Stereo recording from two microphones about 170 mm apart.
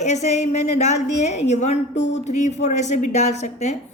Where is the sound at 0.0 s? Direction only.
40° left (ahead or behind).